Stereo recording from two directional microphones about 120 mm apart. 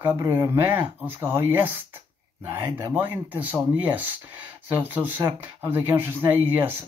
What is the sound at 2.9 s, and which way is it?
Speech, 15° right (ahead or behind).